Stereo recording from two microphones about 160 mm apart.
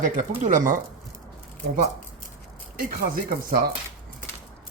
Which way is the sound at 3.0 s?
65° right (ahead or behind).